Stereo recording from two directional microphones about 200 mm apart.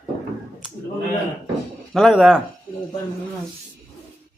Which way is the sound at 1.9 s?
Centre (ahead or behind).